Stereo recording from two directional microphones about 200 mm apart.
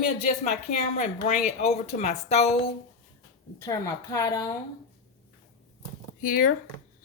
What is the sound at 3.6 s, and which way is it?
Speech, 15° left (ahead or behind).